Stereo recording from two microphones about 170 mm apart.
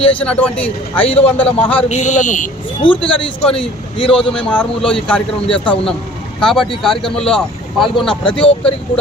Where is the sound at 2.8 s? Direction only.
30° left (ahead or behind).